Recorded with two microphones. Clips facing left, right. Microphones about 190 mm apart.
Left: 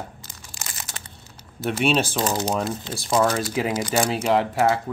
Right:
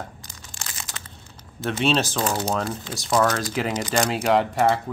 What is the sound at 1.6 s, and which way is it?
Speech, 5° left (ahead or behind).